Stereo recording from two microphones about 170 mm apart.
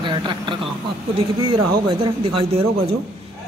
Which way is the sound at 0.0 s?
30° right (ahead or behind).